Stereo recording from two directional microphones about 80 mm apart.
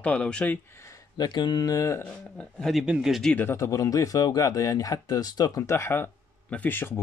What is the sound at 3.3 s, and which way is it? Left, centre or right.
Speech, left.